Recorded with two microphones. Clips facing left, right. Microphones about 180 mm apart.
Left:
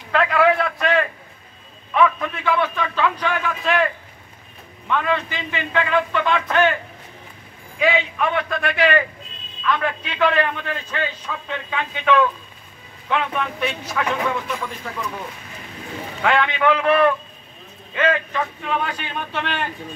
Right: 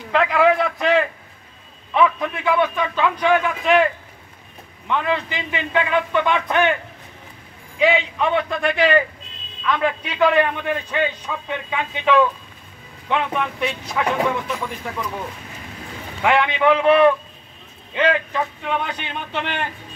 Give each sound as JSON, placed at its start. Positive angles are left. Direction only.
{"t": 0.1, "sound": "a man's voice", "side_deg": -15}
{"t": 4.8, "sound": "a man's voice", "side_deg": -20}
{"t": 7.8, "sound": "a man's voice", "side_deg": -20}
{"t": 16.2, "sound": "a man's voice", "side_deg": -15}